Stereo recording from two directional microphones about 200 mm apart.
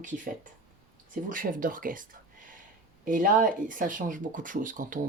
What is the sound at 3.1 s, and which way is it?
Speech, 40° right (ahead or behind).